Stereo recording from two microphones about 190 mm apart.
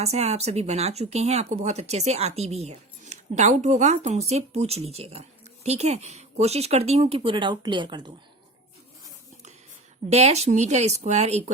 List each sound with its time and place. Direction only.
0.0 s speech: 35° right (ahead or behind)
10.1 s speech: 35° right (ahead or behind)